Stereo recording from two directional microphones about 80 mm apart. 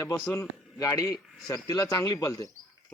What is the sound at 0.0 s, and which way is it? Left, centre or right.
A man's voice, left.